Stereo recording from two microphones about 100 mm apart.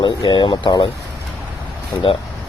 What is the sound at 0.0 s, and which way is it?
Speech, 55° left (ahead or behind).